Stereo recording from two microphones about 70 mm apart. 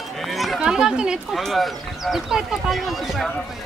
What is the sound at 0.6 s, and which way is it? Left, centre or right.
Speech, centre.